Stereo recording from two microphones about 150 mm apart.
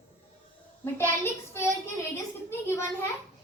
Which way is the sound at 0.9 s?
15° left (ahead or behind).